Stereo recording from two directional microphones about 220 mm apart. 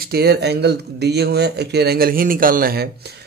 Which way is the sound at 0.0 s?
45° right (ahead or behind).